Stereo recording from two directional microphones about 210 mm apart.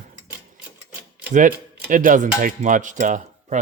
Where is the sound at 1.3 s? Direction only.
40° right (ahead or behind).